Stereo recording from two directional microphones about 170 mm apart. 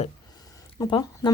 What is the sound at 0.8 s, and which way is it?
Speech, 25° left (ahead or behind).